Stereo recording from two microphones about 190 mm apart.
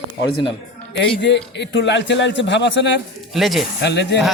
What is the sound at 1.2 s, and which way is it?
A man's voice, 65° left (ahead or behind).